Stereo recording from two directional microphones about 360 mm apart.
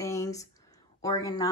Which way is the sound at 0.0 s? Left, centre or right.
Centre.